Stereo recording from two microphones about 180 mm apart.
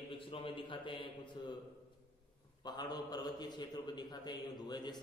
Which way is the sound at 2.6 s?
25° left (ahead or behind).